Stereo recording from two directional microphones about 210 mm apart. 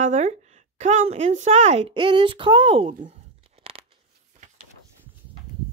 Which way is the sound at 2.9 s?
35° right (ahead or behind).